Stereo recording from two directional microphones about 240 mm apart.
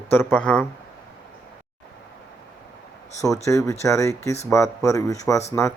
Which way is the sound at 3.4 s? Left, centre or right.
Centre.